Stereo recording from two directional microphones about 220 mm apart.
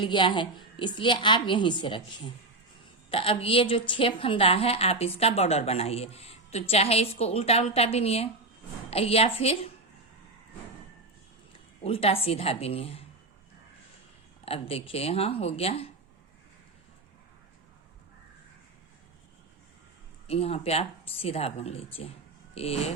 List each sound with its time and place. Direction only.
0.0 s a woman's voice: 20° left (ahead or behind)
11.8 s a woman's voice: 25° left (ahead or behind)
14.4 s a woman's voice: 25° left (ahead or behind)
20.2 s a woman's voice: 25° left (ahead or behind)